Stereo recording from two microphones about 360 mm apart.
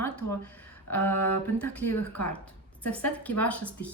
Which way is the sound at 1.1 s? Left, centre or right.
Left.